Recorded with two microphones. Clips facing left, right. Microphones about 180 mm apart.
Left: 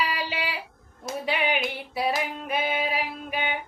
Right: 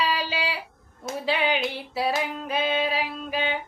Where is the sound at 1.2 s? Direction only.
30° right (ahead or behind).